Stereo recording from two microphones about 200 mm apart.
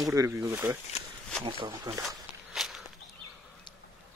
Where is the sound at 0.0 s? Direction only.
15° right (ahead or behind).